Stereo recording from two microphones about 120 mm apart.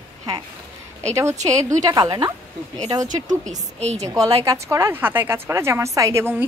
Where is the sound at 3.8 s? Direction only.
65° right (ahead or behind).